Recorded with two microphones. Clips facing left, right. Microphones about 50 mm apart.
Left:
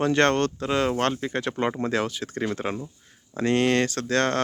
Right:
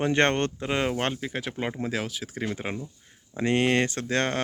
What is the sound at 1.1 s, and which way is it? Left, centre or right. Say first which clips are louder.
Speech: left 4 dB; centre.